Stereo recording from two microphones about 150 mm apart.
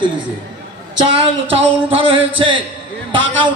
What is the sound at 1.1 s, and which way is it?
A man's voice, 35° right (ahead or behind).